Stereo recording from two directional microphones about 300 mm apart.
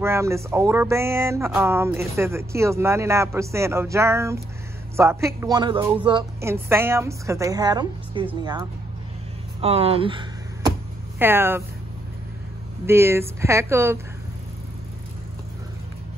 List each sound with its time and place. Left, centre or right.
0.0 s speech: centre
9.6 s a sound: centre
11.1 s speech: centre
12.8 s speech: centre